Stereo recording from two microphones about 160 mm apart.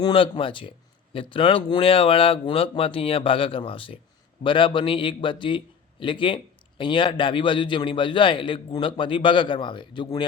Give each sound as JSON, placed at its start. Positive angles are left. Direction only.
{"t": 0.0, "sound": "a man's voice", "side_deg": 35}